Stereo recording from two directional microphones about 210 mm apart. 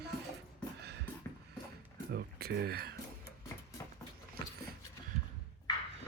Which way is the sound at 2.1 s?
50° right (ahead or behind).